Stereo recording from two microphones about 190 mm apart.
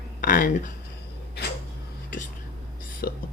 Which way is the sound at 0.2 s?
45° left (ahead or behind).